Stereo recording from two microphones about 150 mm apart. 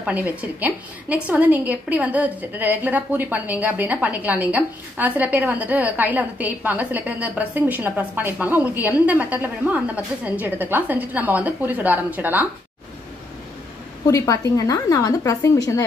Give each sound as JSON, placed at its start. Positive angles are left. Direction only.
{"t": 0.0, "sound": "a woman's voice", "side_deg": -10}
{"t": 14.0, "sound": "a woman's voice", "side_deg": 20}